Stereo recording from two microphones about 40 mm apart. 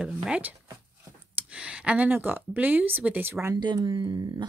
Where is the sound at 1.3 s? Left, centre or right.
Right.